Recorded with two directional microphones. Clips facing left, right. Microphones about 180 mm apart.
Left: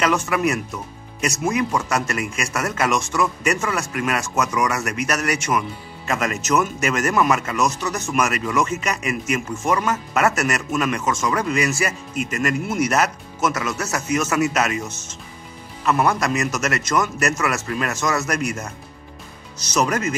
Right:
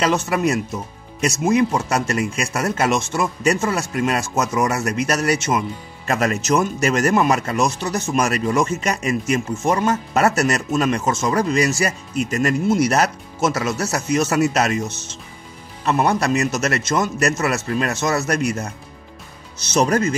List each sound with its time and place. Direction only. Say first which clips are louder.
0.0 s speech: right 1 dB; 30° right (ahead or behind)
15.8 s speech: right 1 dB; 30° right (ahead or behind)